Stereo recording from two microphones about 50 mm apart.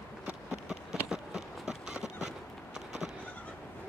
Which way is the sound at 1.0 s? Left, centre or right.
Centre.